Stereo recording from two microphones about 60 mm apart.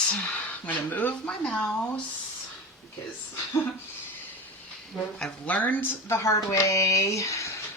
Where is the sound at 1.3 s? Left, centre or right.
Centre.